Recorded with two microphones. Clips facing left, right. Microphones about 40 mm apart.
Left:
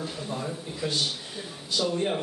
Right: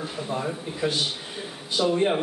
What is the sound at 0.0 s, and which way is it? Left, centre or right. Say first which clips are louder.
A man's voice: right 4 dB; centre.